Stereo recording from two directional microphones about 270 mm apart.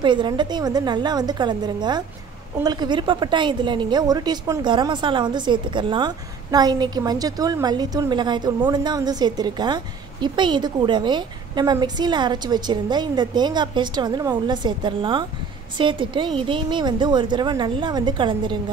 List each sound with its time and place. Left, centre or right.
0.0 s a woman's voice: centre